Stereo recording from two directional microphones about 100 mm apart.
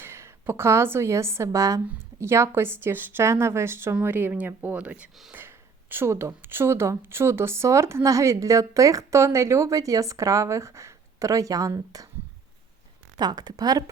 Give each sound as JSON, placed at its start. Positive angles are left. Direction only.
{"t": 0.0, "sound": "speech", "side_deg": -25}
{"t": 13.1, "sound": "speech", "side_deg": -45}